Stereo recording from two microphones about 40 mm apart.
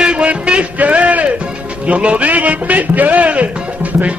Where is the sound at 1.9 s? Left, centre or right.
Right.